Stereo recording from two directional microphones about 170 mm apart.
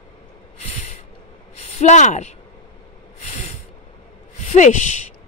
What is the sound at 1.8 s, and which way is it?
Speech, 45° left (ahead or behind).